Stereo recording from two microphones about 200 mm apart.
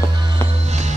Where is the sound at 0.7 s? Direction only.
35° right (ahead or behind).